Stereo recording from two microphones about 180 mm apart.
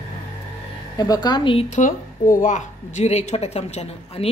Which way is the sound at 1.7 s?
50° left (ahead or behind).